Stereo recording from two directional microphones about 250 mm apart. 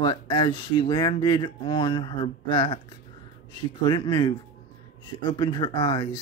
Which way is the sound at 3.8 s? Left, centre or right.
Centre.